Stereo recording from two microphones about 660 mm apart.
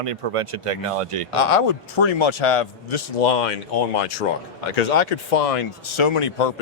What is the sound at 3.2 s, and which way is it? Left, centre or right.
Speech, left.